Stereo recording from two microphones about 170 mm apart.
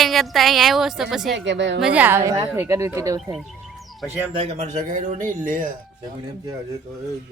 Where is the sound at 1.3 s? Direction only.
90° right.